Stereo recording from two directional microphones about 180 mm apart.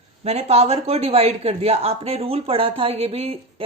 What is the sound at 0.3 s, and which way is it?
Speech, 35° right (ahead or behind).